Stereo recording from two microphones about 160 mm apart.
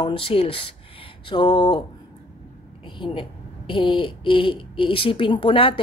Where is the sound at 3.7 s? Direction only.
35° left (ahead or behind).